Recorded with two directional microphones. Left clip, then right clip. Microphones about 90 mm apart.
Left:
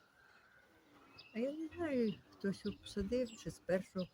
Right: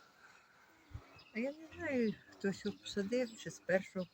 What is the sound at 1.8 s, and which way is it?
Speech, 30° left (ahead or behind).